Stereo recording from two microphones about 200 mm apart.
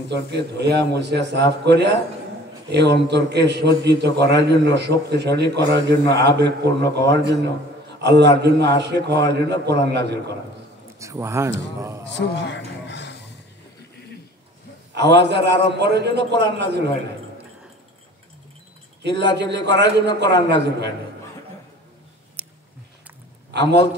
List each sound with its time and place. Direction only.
0.1 s a man's voice: 60° right (ahead or behind)
11.0 s a man's voice: 15° right (ahead or behind)
12.1 s a sound: 60° left (ahead or behind)
15.0 s a man's voice: 60° right (ahead or behind)
19.0 s a man's voice: 60° right (ahead or behind)
22.4 s a sound: 5° right (ahead or behind)
23.5 s a man's voice: 60° right (ahead or behind)